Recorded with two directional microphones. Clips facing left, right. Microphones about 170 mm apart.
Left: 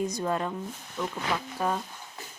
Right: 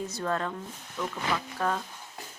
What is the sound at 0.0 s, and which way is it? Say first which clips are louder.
Speech: left 2 dB; 15° left (ahead or behind).